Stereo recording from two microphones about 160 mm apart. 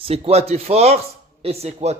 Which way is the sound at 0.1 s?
40° right (ahead or behind).